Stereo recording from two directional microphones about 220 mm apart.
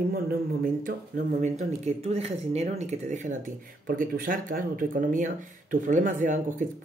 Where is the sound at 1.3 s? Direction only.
30° right (ahead or behind).